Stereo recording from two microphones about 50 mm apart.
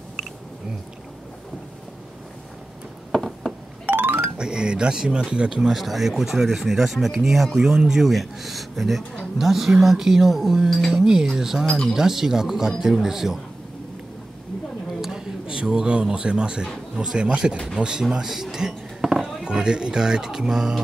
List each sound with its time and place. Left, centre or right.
3.1 s a sound: centre
3.8 s music: right
4.4 s speech: centre
5.6 s speech: centre
10.7 s speech: centre
11.0 s speech: centre
15.0 s a man's voice: centre
18.2 s a sound: centre
19.4 s speech: centre